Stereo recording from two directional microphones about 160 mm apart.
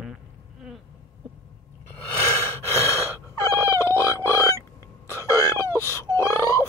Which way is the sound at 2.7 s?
15° left (ahead or behind).